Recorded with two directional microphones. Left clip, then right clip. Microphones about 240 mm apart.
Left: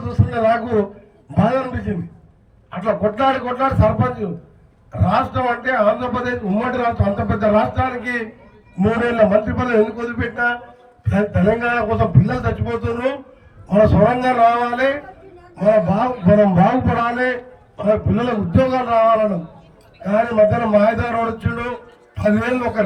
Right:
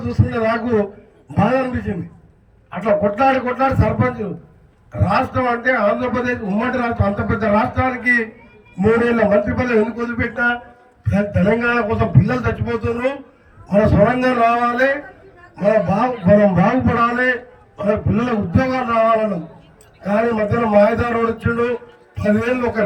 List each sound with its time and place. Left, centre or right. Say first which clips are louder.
0.1 s a man's voice: left 2 dB; centre